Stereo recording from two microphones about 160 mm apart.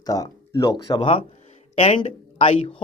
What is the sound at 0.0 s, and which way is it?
Speech, 20° left (ahead or behind).